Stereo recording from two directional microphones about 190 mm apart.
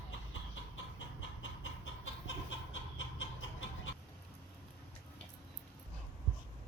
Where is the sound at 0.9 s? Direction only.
80° left.